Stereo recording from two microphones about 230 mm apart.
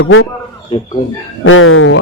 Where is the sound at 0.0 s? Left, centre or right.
Left.